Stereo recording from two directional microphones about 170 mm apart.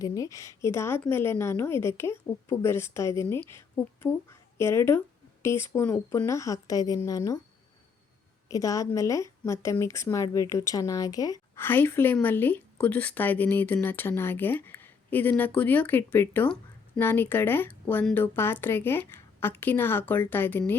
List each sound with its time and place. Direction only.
0.0 s speech: 20° left (ahead or behind)
8.4 s a woman's voice: 20° left (ahead or behind)